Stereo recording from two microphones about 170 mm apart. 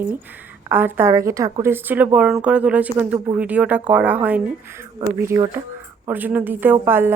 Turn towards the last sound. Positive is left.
turn(degrees=-10)  # may be behind; listen again after turning